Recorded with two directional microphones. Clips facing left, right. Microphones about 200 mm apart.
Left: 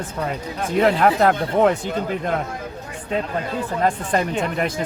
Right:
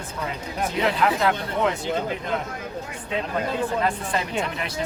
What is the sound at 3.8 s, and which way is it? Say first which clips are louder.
Speech: left 5 dB; 50° left (ahead or behind).